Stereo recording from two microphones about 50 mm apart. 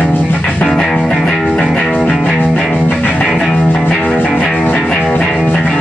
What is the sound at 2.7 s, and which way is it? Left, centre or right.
Music, left.